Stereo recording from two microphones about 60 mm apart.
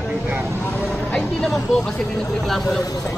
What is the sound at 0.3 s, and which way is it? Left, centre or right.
Vehicle, right.